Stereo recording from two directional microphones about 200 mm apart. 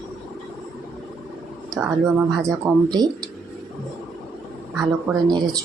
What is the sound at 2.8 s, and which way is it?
Speech, 20° right (ahead or behind).